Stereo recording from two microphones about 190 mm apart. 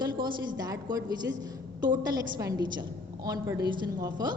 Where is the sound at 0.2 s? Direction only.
20° right (ahead or behind).